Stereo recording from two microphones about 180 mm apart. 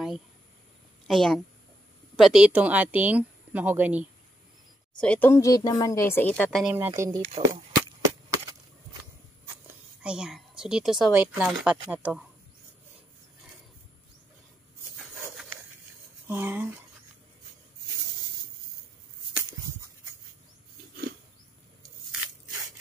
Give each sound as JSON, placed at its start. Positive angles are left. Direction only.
{"t": 1.0, "sound": "a woman's voice", "side_deg": 0}
{"t": 4.9, "sound": "speech", "side_deg": 5}
{"t": 6.7, "sound": "speech", "side_deg": -15}
{"t": 7.4, "sound": "speech", "side_deg": -30}
{"t": 8.0, "sound": "wood", "side_deg": -20}
{"t": 10.0, "sound": "speech", "side_deg": -5}
{"t": 16.3, "sound": "speech", "side_deg": -10}